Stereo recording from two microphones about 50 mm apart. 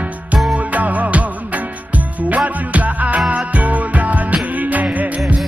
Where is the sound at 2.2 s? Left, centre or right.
Right.